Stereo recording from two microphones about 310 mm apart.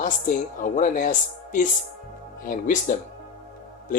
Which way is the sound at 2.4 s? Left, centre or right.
Left.